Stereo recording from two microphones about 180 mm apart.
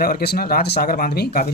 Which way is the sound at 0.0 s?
60° left (ahead or behind).